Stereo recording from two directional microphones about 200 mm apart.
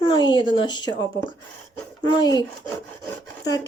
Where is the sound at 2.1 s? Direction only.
20° left (ahead or behind).